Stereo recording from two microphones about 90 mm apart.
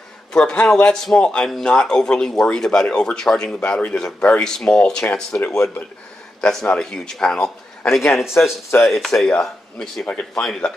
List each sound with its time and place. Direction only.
0.3 s speech: 10° left (ahead or behind)
8.4 s speech: 20° left (ahead or behind)
8.8 s speech: 5° left (ahead or behind)